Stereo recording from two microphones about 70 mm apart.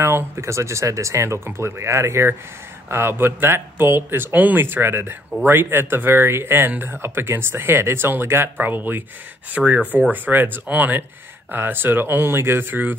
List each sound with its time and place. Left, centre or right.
0.0 s speech: right
9.6 s speech: centre